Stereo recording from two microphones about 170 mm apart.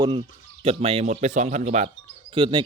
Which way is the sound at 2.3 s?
30° right (ahead or behind).